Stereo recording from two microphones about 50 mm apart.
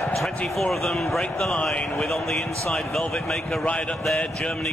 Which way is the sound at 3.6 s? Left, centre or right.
Left.